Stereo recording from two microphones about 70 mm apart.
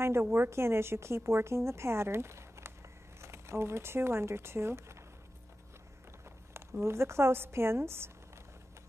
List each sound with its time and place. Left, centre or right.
0.0 s a woman's voice: right
6.8 s a woman's voice: right